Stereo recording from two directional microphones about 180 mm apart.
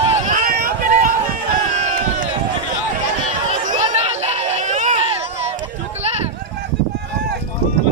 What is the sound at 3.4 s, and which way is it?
Chatter, 45° right (ahead or behind).